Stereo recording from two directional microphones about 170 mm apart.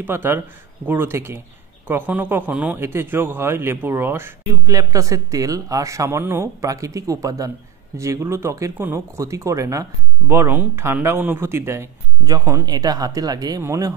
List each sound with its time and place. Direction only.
0.0 s speech: 15° right (ahead or behind)